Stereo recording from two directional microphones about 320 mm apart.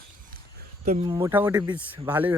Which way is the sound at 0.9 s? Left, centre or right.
Centre.